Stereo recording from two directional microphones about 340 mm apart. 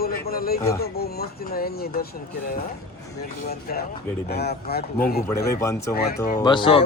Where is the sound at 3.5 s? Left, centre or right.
Left.